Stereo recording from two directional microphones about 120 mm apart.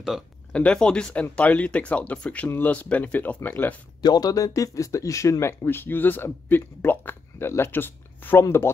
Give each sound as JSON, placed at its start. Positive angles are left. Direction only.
{"t": 0.5, "sound": "speech", "side_deg": 10}
{"t": 4.0, "sound": "speech", "side_deg": 35}